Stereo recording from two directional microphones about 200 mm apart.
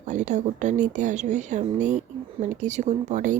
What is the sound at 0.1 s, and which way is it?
A woman's voice, 35° right (ahead or behind).